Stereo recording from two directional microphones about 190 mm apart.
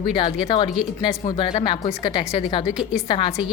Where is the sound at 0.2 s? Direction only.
25° left (ahead or behind).